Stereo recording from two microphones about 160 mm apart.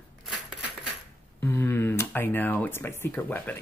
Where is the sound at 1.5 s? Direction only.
15° left (ahead or behind).